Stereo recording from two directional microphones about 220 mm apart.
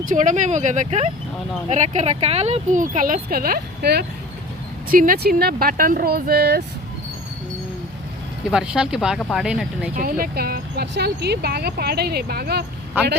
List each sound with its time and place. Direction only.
0.1 s speech: 35° right (ahead or behind)
8.4 s speech: 5° right (ahead or behind)
9.9 s speech: 40° right (ahead or behind)